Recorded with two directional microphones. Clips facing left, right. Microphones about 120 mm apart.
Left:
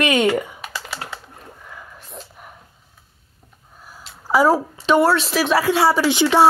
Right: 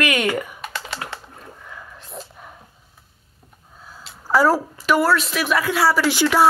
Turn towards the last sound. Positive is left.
turn(degrees=25)  # may be behind; listen again after turning